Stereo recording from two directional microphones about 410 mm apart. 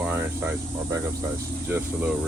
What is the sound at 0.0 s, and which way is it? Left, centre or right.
Cricket, centre.